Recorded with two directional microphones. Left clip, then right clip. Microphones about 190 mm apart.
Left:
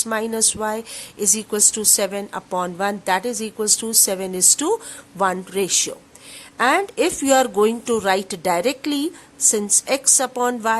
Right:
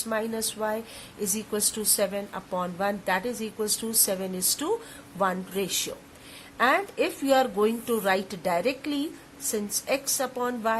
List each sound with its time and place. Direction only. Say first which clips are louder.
0.1 s a woman's voice: left 6 dB; 35° left (ahead or behind)